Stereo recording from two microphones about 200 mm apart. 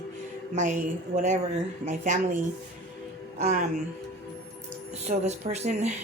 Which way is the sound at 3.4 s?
40° right (ahead or behind).